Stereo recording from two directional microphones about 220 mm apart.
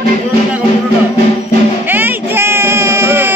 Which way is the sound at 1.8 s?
10° right (ahead or behind).